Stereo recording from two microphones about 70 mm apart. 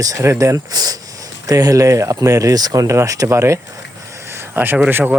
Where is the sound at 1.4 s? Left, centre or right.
Right.